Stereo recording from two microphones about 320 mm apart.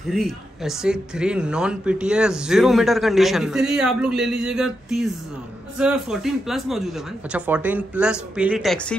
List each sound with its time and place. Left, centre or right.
0.1 s a man's voice: centre